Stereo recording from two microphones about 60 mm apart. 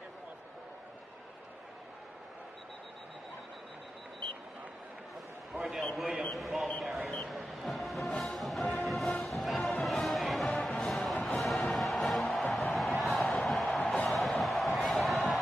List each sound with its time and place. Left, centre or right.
5.9 s speech: centre
7.2 s music: centre